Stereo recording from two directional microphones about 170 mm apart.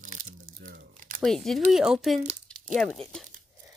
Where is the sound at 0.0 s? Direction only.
50° right (ahead or behind).